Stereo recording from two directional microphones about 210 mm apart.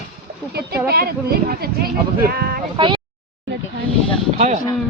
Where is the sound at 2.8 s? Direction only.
25° right (ahead or behind).